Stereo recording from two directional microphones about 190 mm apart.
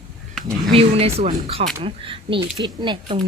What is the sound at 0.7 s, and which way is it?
Speech, 30° right (ahead or behind).